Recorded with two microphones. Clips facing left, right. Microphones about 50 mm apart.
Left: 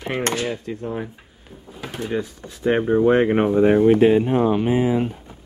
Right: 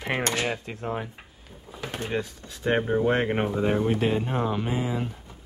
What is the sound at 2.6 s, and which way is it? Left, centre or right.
Speech, centre.